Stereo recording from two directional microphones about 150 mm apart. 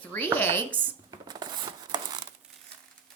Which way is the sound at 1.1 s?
25° right (ahead or behind).